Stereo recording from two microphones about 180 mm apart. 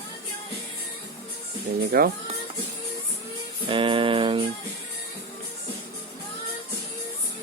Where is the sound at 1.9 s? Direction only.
60° right (ahead or behind).